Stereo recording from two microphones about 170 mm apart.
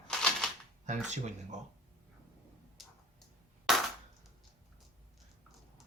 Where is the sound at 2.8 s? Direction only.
Centre (ahead or behind).